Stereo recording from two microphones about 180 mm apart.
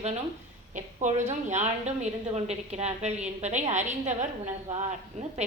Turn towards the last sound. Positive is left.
turn(degrees=-40)  # may be behind; listen again after turning